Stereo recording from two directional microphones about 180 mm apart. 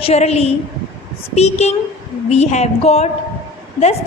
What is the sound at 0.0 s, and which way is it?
A woman's voice, 35° left (ahead or behind).